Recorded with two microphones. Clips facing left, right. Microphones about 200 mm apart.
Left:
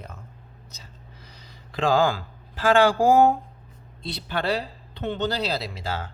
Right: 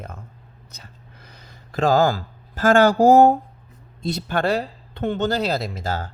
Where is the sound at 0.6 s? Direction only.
55° right (ahead or behind).